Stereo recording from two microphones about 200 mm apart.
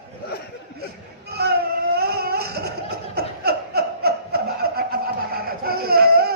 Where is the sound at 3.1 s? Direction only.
50° right (ahead or behind).